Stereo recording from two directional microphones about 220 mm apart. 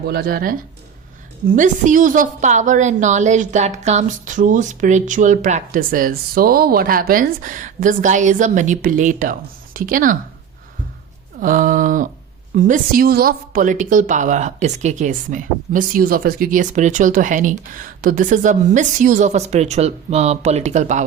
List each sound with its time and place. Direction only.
0.1 s a woman's voice: 45° right (ahead or behind)
11.3 s a woman's voice: 40° right (ahead or behind)